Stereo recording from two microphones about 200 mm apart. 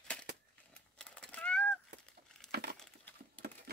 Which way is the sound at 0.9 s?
5° left (ahead or behind).